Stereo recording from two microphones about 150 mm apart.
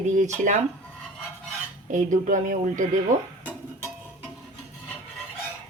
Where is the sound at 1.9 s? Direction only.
60° right (ahead or behind).